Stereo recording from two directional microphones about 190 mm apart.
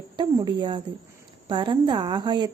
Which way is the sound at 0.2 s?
25° right (ahead or behind).